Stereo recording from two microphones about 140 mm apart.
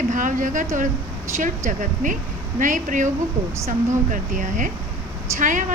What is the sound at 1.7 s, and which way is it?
A woman's voice, 65° right (ahead or behind).